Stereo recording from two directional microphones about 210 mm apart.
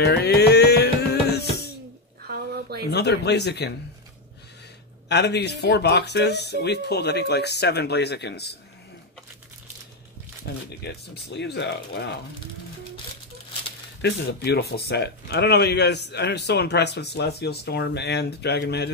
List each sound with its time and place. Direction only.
0.0 s music: 50° left (ahead or behind)
2.2 s a sound: 50° right (ahead or behind)
2.9 s speech: 55° left (ahead or behind)
5.0 s speech: 55° left (ahead or behind)
10.5 s speech: 50° left (ahead or behind)
14.0 s speech: 50° left (ahead or behind)